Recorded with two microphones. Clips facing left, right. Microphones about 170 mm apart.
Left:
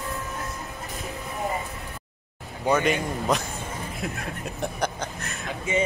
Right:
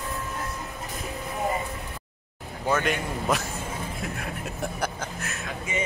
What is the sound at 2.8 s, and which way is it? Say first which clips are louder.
Speech: left 3 dB; centre (ahead or behind).